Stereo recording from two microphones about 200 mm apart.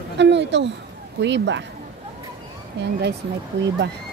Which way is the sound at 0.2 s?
60° right (ahead or behind).